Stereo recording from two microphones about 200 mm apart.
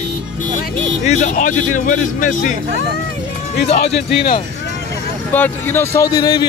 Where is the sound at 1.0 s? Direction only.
40° left (ahead or behind).